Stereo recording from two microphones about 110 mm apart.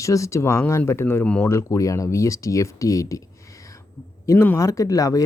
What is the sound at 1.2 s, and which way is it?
Speech, 10° left (ahead or behind).